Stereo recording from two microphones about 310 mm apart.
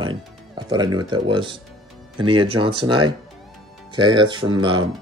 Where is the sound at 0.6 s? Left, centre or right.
Centre.